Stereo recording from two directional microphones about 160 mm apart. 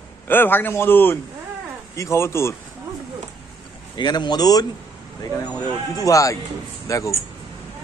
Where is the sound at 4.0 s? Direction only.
25° left (ahead or behind).